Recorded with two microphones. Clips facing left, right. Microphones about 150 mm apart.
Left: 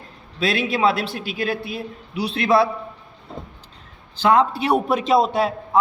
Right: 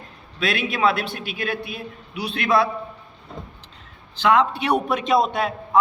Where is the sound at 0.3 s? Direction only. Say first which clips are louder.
Left 3 dB; 30° left (ahead or behind).